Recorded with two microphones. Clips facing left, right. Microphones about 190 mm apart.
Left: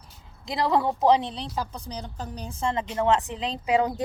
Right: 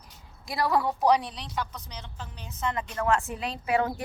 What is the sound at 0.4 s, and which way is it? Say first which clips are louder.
A woman's voice: left 2 dB; 20° left (ahead or behind).